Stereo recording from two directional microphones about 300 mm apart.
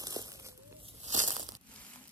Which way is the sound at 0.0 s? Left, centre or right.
Centre.